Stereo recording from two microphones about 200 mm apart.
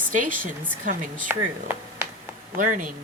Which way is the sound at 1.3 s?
10° right (ahead or behind).